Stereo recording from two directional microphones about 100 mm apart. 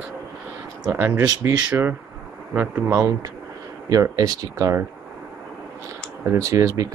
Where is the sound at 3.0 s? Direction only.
30° right (ahead or behind).